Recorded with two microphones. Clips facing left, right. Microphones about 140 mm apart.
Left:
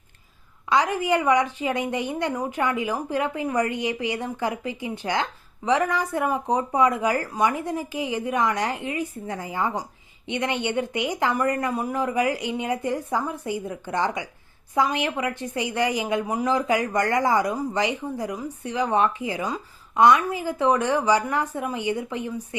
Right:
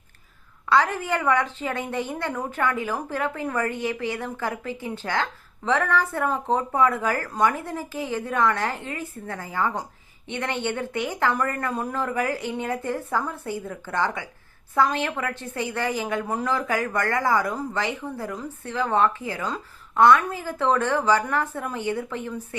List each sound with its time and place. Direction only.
0.7 s a woman's voice: 15° left (ahead or behind)